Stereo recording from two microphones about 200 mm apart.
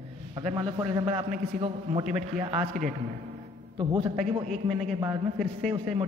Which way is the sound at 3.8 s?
20° right (ahead or behind).